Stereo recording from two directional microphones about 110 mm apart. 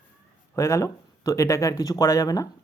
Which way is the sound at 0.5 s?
30° left (ahead or behind).